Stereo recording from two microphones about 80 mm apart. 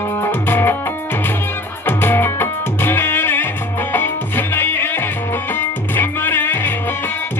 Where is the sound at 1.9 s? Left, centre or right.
Left.